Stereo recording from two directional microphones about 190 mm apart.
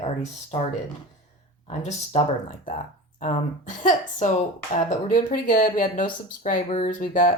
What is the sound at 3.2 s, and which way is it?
Speech, 40° left (ahead or behind).